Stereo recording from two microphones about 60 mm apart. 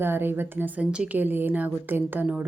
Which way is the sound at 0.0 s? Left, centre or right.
Right.